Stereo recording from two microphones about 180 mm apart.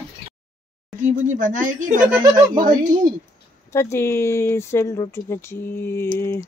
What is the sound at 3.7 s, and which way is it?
Speech, 15° left (ahead or behind).